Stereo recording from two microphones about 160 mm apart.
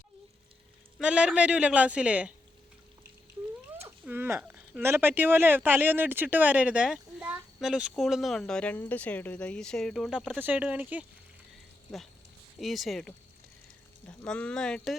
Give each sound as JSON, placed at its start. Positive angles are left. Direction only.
{"t": 0.9, "sound": "speech", "side_deg": -5}
{"t": 4.0, "sound": "speech", "side_deg": -15}
{"t": 11.5, "sound": "a sound", "side_deg": 0}
{"t": 12.5, "sound": "speech", "side_deg": 0}
{"t": 14.3, "sound": "speech", "side_deg": 5}